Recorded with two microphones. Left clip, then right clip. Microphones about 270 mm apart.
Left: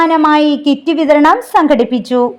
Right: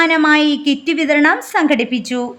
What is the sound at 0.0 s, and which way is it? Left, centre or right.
A woman's voice, centre.